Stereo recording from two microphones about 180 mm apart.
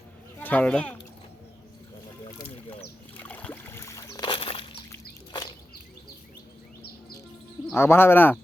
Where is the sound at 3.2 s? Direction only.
10° left (ahead or behind).